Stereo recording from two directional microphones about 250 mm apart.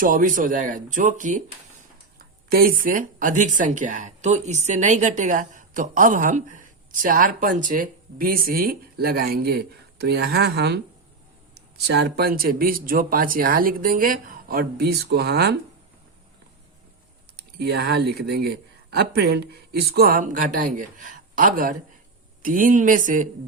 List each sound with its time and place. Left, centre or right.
0.0 s speech: right
17.3 s speech: right